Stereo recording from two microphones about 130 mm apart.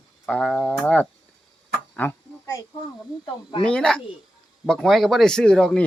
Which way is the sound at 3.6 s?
5° left (ahead or behind).